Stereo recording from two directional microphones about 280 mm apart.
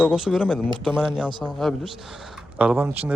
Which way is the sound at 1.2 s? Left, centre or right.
Centre.